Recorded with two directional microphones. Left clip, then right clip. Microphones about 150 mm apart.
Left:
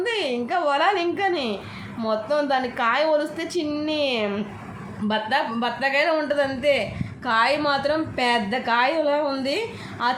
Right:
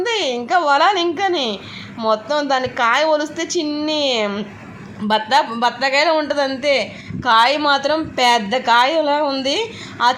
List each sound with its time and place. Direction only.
0.0 s a woman's voice: 25° right (ahead or behind)